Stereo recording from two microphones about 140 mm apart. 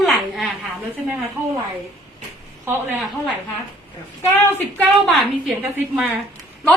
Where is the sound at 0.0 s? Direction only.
Centre (ahead or behind).